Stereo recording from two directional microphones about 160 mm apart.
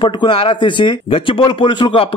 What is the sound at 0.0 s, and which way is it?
Speech, 30° left (ahead or behind).